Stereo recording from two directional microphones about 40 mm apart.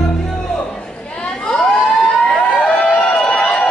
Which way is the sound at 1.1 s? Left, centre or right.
Centre.